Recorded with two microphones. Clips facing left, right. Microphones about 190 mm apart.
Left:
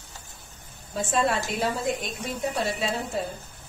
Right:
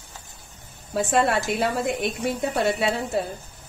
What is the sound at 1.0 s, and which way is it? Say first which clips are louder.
A woman's voice: right 4 dB; 65° right (ahead or behind).